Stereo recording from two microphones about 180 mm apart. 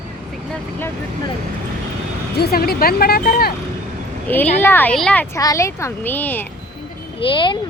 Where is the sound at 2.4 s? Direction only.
55° left (ahead or behind).